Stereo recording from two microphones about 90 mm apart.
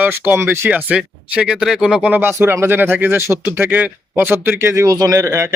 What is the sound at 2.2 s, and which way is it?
Speech, 25° right (ahead or behind).